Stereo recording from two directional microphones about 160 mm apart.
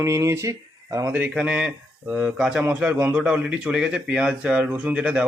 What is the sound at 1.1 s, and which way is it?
Speech, 10° right (ahead or behind).